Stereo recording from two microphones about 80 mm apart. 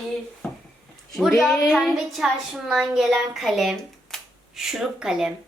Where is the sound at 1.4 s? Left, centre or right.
Centre.